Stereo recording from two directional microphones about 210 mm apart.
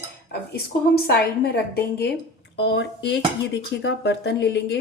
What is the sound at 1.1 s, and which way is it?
A woman's voice, 50° left (ahead or behind).